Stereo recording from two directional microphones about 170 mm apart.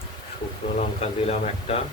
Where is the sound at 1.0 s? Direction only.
40° left (ahead or behind).